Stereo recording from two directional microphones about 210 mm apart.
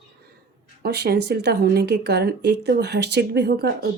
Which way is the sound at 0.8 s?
50° right (ahead or behind).